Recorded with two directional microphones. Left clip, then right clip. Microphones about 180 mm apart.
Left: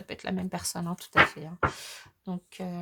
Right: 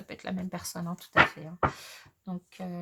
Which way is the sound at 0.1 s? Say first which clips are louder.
Left 3 dB; 40° left (ahead or behind).